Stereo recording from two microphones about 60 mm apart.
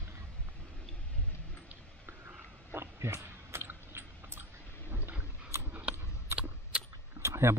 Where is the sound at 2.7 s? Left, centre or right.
Right.